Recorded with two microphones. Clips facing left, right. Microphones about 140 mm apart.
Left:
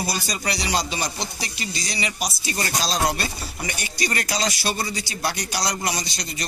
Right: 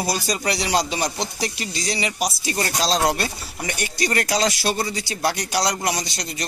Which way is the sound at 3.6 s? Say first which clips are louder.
Right 4 dB; 65° right (ahead or behind).